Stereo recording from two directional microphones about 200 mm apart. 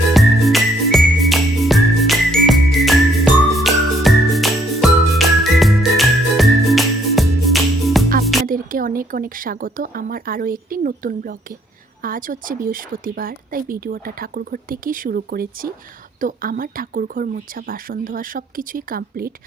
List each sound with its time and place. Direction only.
0.1 s music: centre (ahead or behind)
8.4 s speech: 45° right (ahead or behind)